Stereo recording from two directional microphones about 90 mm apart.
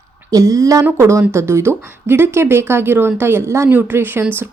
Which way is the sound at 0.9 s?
30° right (ahead or behind).